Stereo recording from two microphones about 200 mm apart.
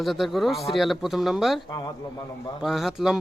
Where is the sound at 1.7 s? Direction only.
20° left (ahead or behind).